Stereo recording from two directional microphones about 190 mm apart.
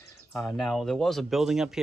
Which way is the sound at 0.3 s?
Centre (ahead or behind).